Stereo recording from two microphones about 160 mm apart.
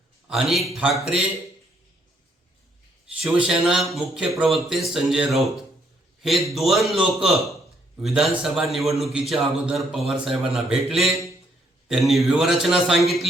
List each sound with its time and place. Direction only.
0.3 s a man's voice: centre (ahead or behind)
3.2 s a man's voice: 5° right (ahead or behind)